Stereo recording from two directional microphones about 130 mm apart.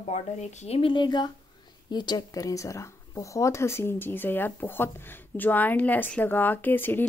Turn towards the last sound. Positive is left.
turn(degrees=15)  # may be behind; listen again after turning